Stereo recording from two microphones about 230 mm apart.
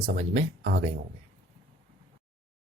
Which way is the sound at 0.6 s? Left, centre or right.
Right.